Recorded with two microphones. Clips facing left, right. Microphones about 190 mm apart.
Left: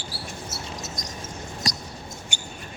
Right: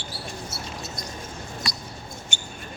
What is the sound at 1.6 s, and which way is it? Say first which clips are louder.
Mouse: left 5 dB; 45° left (ahead or behind).